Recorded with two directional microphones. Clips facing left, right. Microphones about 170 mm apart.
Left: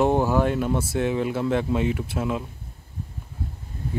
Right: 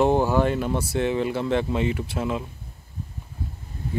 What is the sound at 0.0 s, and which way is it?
Speech, centre (ahead or behind).